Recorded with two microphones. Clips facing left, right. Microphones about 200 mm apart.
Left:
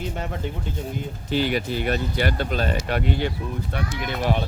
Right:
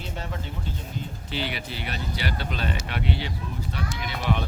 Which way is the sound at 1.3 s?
45° left (ahead or behind).